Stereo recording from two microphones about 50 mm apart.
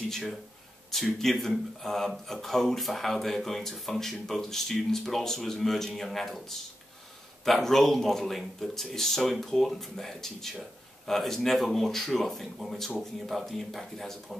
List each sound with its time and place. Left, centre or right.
0.1 s speech: centre
7.4 s speech: centre